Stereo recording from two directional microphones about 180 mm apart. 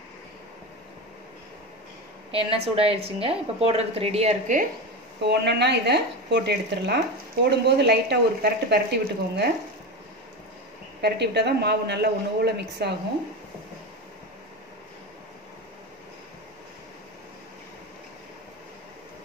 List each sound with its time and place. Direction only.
2.3 s a woman's voice: 30° right (ahead or behind)
5.2 s speech: 70° right (ahead or behind)
11.0 s speech: 65° right (ahead or behind)